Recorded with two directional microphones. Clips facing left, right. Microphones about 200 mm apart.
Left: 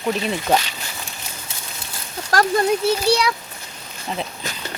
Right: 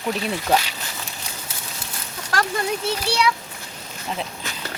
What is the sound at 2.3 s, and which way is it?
Speech, 40° left (ahead or behind).